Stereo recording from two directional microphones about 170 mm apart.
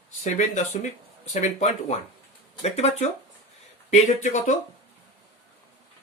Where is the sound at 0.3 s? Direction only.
45° left (ahead or behind).